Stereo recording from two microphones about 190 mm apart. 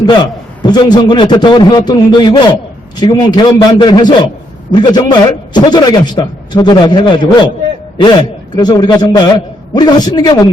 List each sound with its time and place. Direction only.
0.0 s a man's voice: 25° left (ahead or behind)